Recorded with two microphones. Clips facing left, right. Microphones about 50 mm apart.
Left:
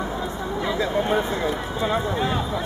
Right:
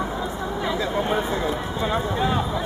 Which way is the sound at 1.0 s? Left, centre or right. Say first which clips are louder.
Left 1 dB; centre.